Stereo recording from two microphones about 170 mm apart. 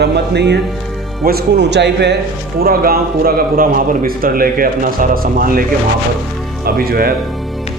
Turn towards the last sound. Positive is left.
turn(degrees=-60)  # may be behind; listen again after turning